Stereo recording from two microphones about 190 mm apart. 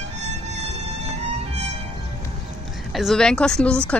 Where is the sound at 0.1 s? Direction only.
35° right (ahead or behind).